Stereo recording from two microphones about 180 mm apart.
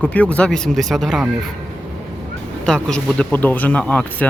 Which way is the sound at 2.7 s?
5° left (ahead or behind).